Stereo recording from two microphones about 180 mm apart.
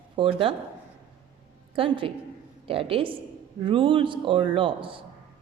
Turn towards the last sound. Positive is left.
turn(degrees=-30)  # may be behind; listen again after turning